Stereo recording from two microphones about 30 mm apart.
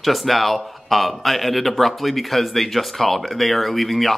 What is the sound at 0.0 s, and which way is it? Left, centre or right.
Speech, centre.